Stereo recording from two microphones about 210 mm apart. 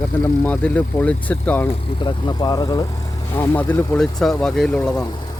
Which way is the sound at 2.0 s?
20° left (ahead or behind).